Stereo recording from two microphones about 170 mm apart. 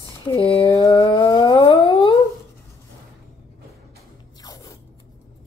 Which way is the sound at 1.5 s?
30° left (ahead or behind).